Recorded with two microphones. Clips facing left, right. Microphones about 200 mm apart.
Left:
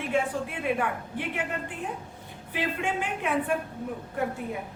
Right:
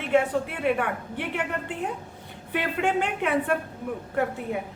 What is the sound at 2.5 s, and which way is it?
A woman's voice, 65° right (ahead or behind).